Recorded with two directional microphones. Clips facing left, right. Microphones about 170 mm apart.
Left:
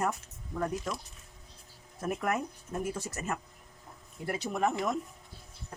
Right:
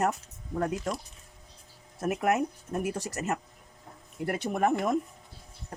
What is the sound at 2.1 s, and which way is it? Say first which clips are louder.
Speech: right 5 dB; 75° right (ahead or behind).